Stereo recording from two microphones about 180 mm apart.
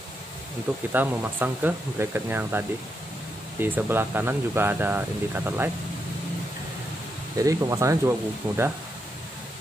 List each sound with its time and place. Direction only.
0.9 s speech: 10° right (ahead or behind)
7.3 s speech: 20° right (ahead or behind)